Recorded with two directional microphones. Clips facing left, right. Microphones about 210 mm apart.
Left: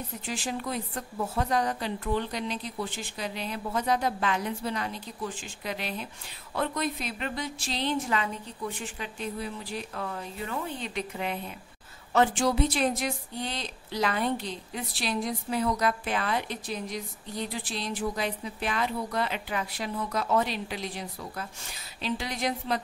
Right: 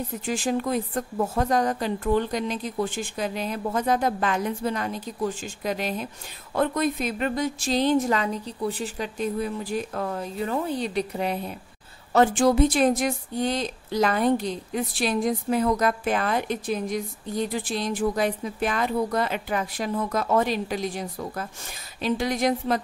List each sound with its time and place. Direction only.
0.2 s speech: 45° right (ahead or behind)